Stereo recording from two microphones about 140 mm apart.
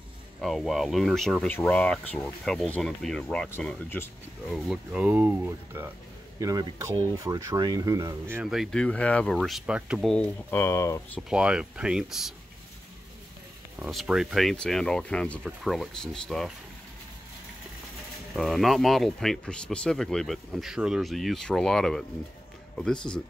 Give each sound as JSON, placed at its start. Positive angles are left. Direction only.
{"t": 0.4, "sound": "speech", "side_deg": 0}
{"t": 3.4, "sound": "speech", "side_deg": 15}
{"t": 4.5, "sound": "speech", "side_deg": 0}
{"t": 6.4, "sound": "speech", "side_deg": -25}
{"t": 8.4, "sound": "speech", "side_deg": -5}
{"t": 8.8, "sound": "speech", "side_deg": 10}
{"t": 10.1, "sound": "speech", "side_deg": 10}
{"t": 11.1, "sound": "speech", "side_deg": -5}
{"t": 13.7, "sound": "speech", "side_deg": -5}
{"t": 18.3, "sound": "speech", "side_deg": 0}